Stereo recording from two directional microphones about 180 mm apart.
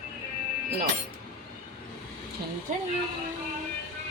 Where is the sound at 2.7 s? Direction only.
45° right (ahead or behind).